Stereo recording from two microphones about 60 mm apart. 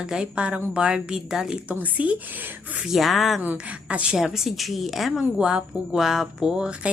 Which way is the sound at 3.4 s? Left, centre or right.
Right.